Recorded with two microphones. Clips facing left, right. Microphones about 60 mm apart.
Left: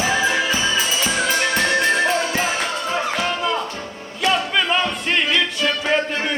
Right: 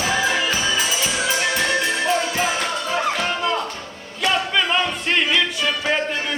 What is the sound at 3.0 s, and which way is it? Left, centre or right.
Music, centre.